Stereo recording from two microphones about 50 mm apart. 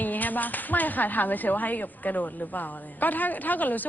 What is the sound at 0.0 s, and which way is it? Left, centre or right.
Speech, left.